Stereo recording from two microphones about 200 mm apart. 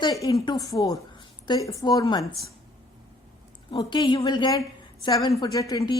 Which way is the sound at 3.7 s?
25° left (ahead or behind).